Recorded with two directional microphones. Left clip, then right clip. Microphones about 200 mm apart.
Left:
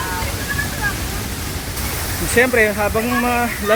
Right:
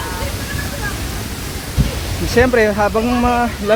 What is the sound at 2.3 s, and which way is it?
Speech, 15° right (ahead or behind).